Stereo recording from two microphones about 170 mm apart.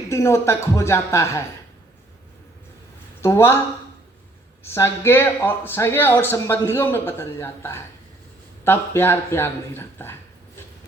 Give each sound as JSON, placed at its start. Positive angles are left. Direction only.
{"t": 0.1, "sound": "speech", "side_deg": 15}
{"t": 3.2, "sound": "speech", "side_deg": 15}
{"t": 4.6, "sound": "speech", "side_deg": 15}